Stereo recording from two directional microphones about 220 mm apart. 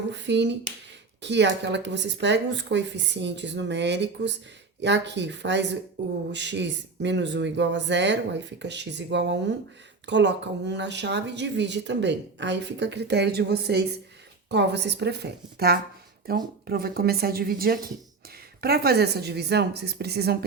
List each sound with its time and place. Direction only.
0.1 s speech: 50° right (ahead or behind)